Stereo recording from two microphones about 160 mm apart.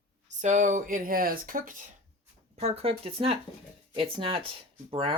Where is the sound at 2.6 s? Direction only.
40° right (ahead or behind).